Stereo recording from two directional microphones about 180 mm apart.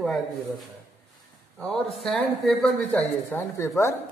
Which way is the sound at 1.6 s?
Centre (ahead or behind).